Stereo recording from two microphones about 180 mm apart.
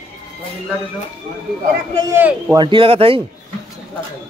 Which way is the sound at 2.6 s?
25° right (ahead or behind).